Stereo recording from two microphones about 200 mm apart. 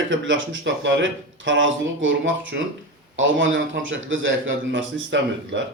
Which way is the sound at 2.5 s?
55° right (ahead or behind).